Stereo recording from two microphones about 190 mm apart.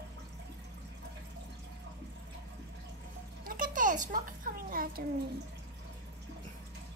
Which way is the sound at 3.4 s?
45° right (ahead or behind).